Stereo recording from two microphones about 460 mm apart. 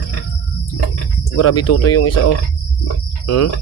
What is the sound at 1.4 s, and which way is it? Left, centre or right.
Speech, left.